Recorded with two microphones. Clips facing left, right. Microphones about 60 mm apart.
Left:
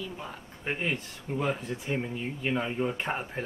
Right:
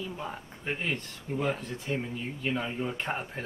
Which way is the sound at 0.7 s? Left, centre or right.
Centre.